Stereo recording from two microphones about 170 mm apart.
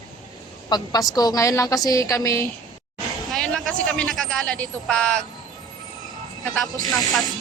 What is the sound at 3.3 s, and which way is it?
Speech, centre (ahead or behind).